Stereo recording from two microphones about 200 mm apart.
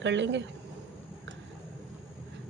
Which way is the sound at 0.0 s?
65° right (ahead or behind).